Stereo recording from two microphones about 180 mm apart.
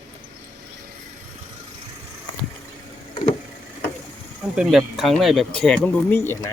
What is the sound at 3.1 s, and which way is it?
Vehicle, 35° left (ahead or behind).